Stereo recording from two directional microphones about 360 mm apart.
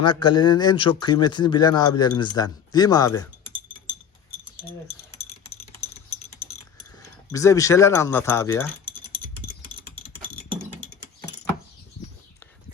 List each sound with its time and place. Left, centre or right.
0.0 s speech: centre
5.3 s typing: centre
7.3 s speech: centre
9.4 s typing: centre